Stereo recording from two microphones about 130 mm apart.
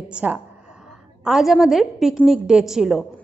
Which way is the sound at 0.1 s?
10° right (ahead or behind).